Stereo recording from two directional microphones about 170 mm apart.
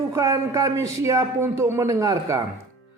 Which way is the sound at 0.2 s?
20° right (ahead or behind).